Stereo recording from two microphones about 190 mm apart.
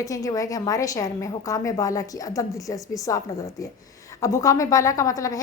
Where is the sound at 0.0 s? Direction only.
20° left (ahead or behind).